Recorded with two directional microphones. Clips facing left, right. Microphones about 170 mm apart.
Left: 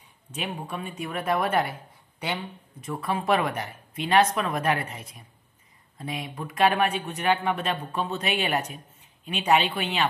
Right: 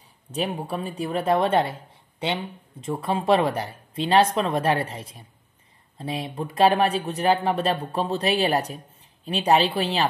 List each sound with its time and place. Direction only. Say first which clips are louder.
0.3 s speech: right 6 dB; 35° right (ahead or behind)